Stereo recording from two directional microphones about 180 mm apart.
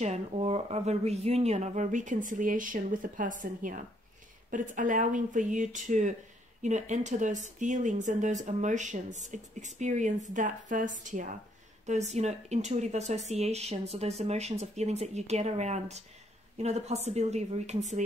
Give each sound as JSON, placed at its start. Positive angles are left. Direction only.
{"t": 0.0, "sound": "speech", "side_deg": -35}